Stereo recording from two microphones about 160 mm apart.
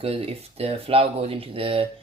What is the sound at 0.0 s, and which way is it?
Speech, 35° right (ahead or behind).